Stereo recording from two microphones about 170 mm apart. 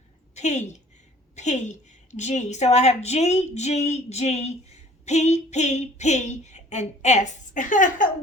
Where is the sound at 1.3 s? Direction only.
45° left (ahead or behind).